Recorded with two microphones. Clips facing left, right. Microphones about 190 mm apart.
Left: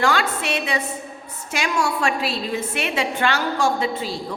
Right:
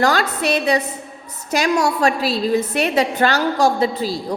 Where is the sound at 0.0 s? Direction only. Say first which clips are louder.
Right 3 dB; 40° right (ahead or behind).